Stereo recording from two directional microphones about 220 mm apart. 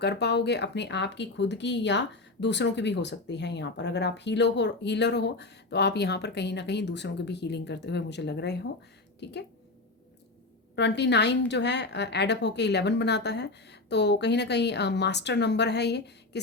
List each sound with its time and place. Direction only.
0.0 s speech: 50° left (ahead or behind)
10.8 s speech: 50° left (ahead or behind)